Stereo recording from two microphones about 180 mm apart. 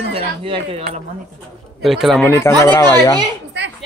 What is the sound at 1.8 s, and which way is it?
Speech, centre (ahead or behind).